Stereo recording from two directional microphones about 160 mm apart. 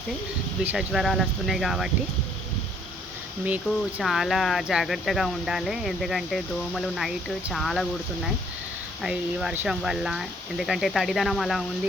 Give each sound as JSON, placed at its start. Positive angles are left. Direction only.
{"t": 0.6, "sound": "speech", "side_deg": -5}
{"t": 3.4, "sound": "speech", "side_deg": -10}
{"t": 9.0, "sound": "speech", "side_deg": 0}